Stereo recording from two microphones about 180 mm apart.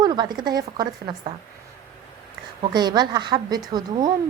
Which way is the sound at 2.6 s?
25° right (ahead or behind).